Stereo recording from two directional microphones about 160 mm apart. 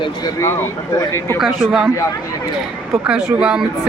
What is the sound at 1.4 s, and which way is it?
Speech, centre (ahead or behind).